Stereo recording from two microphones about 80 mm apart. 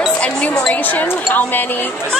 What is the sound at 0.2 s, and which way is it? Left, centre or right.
A woman's voice, centre.